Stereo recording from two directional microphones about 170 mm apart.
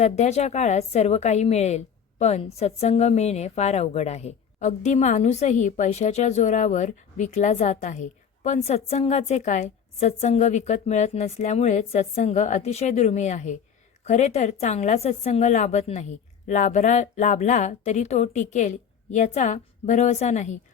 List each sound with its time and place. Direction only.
0.0 s a woman's voice: 40° left (ahead or behind)